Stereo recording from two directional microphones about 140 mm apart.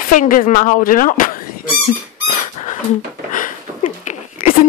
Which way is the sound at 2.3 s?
65° left (ahead or behind).